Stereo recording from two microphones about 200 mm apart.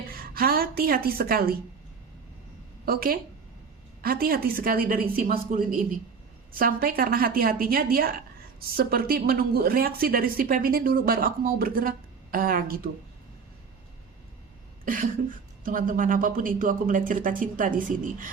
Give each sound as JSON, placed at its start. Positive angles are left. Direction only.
{"t": 0.1, "sound": "a woman's voice", "side_deg": -50}
{"t": 2.8, "sound": "speech", "side_deg": -50}
{"t": 14.8, "sound": "cough", "side_deg": -45}
{"t": 15.6, "sound": "speech", "side_deg": -45}